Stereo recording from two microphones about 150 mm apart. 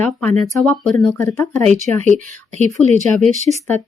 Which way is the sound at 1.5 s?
50° right (ahead or behind).